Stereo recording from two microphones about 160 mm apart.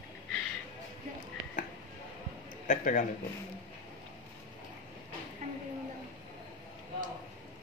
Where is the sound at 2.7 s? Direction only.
50° left (ahead or behind).